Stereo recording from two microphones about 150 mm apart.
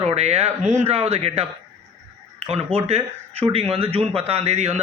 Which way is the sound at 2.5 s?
40° right (ahead or behind).